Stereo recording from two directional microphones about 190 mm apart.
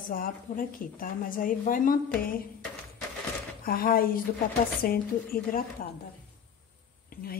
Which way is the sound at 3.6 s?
50° left (ahead or behind).